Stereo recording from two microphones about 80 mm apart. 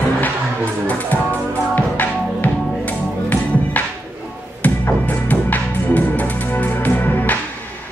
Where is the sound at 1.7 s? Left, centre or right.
Left.